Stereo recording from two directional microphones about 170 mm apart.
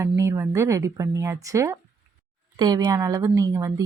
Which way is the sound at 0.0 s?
15° right (ahead or behind).